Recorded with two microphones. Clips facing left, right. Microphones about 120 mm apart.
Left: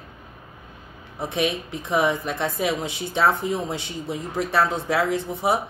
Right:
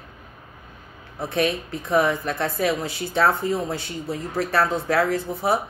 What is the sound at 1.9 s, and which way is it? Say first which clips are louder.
Speech: right 1 dB; 15° left (ahead or behind).